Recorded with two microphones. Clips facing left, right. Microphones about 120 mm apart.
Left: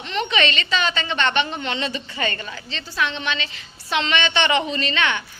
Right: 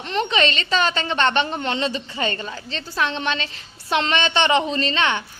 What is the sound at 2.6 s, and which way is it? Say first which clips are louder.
A woman's voice: right 1 dB; 40° right (ahead or behind).